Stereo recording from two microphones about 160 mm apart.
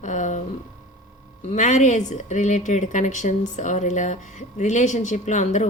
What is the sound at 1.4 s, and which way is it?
A woman's voice, 50° left (ahead or behind).